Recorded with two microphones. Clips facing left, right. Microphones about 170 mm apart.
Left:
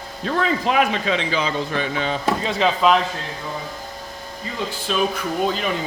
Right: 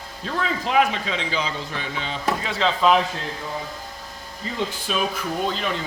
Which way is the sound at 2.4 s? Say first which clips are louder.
Left 4 dB; 15° left (ahead or behind).